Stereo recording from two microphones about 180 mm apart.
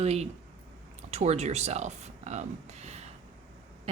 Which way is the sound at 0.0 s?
35° right (ahead or behind).